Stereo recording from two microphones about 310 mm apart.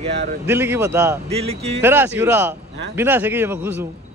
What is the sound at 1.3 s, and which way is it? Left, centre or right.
Speech, centre.